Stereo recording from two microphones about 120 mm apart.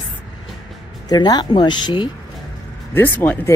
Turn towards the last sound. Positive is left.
turn(degrees=15)  # may be behind; listen again after turning